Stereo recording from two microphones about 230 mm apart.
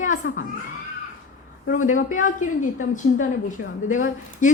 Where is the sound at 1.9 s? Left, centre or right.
Left.